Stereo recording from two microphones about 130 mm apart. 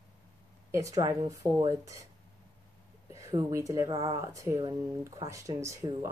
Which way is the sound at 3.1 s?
25° right (ahead or behind).